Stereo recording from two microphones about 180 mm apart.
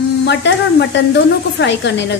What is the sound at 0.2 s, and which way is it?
Speech, 75° left (ahead or behind).